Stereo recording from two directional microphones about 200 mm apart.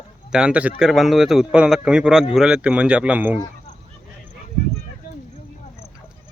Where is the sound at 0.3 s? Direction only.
5° right (ahead or behind).